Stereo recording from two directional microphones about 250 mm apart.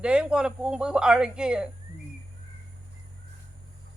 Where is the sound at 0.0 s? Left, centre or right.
Centre.